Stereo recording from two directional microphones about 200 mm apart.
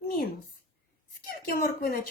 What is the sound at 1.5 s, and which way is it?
Speech, 50° left (ahead or behind).